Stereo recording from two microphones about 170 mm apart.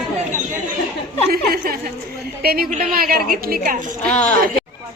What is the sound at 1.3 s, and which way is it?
A woman's voice, 60° right (ahead or behind).